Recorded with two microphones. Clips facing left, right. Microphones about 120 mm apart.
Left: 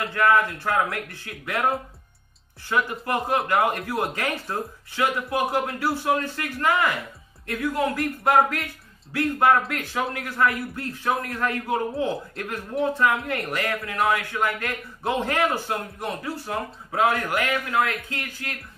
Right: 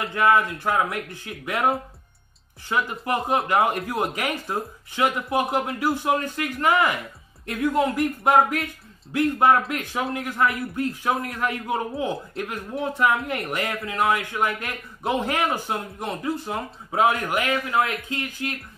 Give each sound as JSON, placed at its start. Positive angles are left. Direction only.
{"t": 0.0, "sound": "speech", "side_deg": -20}
{"t": 2.7, "sound": "speech", "side_deg": -15}